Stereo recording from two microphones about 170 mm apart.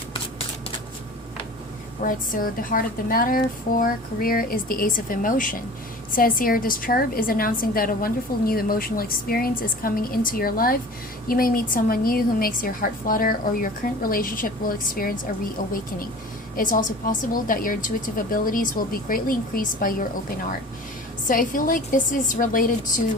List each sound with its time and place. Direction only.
2.0 s a woman's voice: 55° left (ahead or behind)
16.6 s a woman's voice: 55° left (ahead or behind)